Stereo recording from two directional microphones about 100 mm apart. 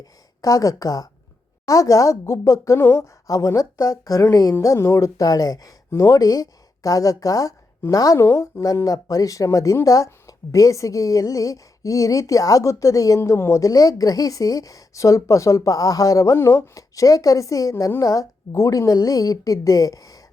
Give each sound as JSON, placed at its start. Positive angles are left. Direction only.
{"t": 0.0, "sound": "speech", "side_deg": 35}